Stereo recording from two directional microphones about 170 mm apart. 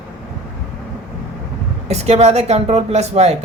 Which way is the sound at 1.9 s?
40° right (ahead or behind).